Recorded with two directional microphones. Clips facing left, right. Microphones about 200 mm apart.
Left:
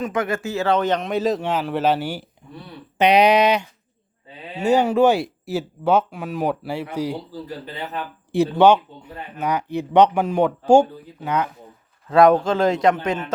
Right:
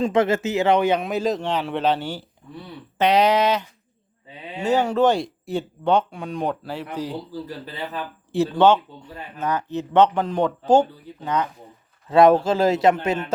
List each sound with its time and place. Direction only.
0.0 s speech: 25° right (ahead or behind); by 7.2 s 10° left (ahead or behind)
8.3 s speech: 15° left (ahead or behind)
12.0 s speech: 5° right (ahead or behind)